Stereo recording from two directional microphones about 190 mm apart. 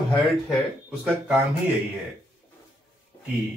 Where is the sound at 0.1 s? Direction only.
5° right (ahead or behind).